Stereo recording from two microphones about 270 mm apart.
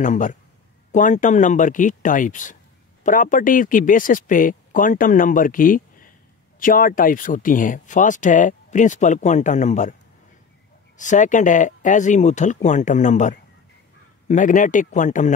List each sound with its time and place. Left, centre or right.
0.0 s speech: left
11.0 s speech: left